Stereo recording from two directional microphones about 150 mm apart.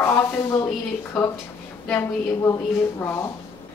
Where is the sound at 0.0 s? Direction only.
15° left (ahead or behind).